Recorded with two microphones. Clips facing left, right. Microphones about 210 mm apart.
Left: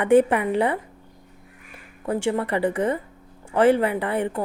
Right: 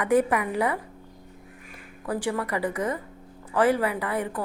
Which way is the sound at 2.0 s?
25° left (ahead or behind).